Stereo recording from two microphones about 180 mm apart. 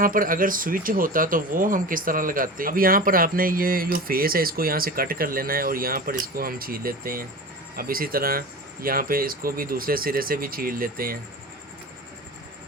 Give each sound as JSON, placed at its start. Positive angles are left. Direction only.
{"t": 0.0, "sound": "speech", "side_deg": -50}